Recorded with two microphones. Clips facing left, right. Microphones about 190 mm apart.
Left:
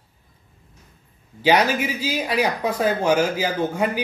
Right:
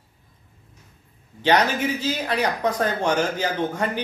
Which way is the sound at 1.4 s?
10° left (ahead or behind).